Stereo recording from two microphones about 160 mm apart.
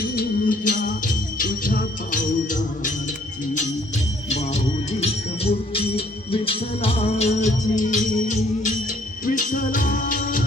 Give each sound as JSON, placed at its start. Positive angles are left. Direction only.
{"t": 0.0, "sound": "music", "side_deg": 65}
{"t": 4.3, "sound": "music", "side_deg": 45}